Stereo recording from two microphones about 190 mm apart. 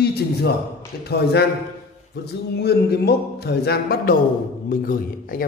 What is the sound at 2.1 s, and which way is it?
A man's voice, 60° left (ahead or behind).